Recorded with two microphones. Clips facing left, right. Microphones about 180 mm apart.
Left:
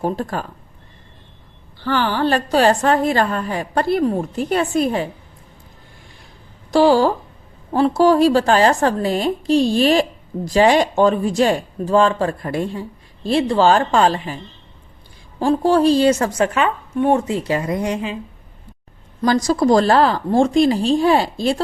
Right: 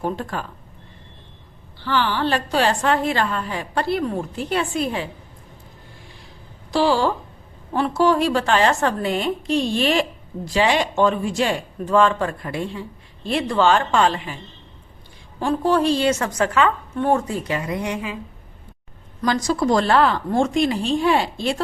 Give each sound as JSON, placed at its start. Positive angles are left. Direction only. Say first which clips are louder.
{"t": 0.0, "sound": "a woman's voice", "louder": "left 4 dB", "side_deg": 40}
{"t": 1.8, "sound": "a woman's voice", "louder": "left 3 dB", "side_deg": 45}
{"t": 6.7, "sound": "a woman's voice", "louder": "left 5 dB", "side_deg": 45}
{"t": 15.4, "sound": "a woman's voice", "louder": "left 4 dB", "side_deg": 35}
{"t": 16.4, "sound": "a woman's voice", "louder": "left 1 dB", "side_deg": 20}
{"t": 17.9, "sound": "a woman's voice", "louder": "left 4 dB", "side_deg": 30}
{"t": 19.2, "sound": "a woman's voice", "louder": "left 4 dB", "side_deg": 35}